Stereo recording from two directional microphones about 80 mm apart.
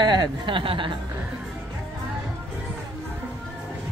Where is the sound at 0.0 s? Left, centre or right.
Right.